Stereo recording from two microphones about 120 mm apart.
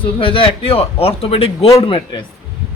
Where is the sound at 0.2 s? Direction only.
45° left (ahead or behind).